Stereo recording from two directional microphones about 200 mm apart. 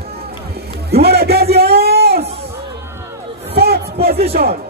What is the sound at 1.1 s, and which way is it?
Music, 50° right (ahead or behind).